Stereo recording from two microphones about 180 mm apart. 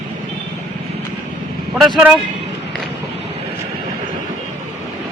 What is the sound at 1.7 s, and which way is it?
Speech, centre (ahead or behind).